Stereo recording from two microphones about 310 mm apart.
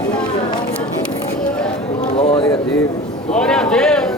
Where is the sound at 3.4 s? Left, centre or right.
Centre.